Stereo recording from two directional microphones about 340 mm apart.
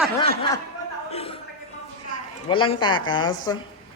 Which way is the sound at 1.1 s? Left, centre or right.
Centre.